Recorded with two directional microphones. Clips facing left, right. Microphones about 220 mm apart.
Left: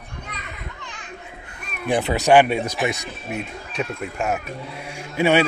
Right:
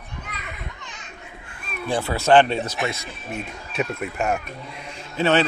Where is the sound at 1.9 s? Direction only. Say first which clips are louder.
Left 2 dB; 20° left (ahead or behind).